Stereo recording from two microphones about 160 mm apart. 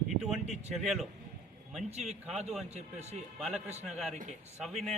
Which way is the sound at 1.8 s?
45° right (ahead or behind).